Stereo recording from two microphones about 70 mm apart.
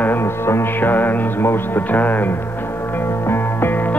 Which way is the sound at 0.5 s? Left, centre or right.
Left.